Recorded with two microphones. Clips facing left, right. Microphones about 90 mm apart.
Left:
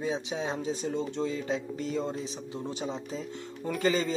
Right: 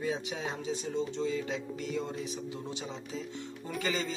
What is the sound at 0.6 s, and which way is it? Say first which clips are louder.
Speech: left 2 dB; 45° left (ahead or behind).